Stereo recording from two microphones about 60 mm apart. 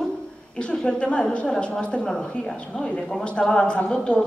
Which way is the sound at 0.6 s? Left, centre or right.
Centre.